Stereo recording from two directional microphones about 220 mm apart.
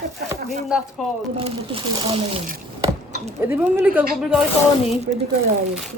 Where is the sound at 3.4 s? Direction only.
10° right (ahead or behind).